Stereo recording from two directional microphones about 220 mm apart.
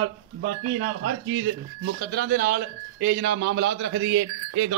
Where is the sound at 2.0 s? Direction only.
45° right (ahead or behind).